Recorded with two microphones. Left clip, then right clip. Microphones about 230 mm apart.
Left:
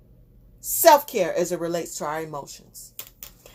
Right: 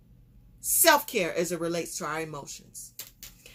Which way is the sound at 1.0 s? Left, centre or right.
Centre.